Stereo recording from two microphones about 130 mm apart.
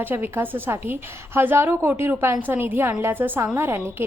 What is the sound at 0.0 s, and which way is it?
A woman's voice, 15° right (ahead or behind).